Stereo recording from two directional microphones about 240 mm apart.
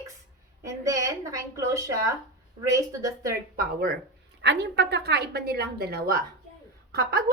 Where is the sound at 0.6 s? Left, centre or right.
Centre.